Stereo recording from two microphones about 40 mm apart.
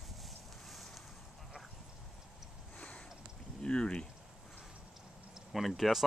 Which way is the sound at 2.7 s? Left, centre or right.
Left.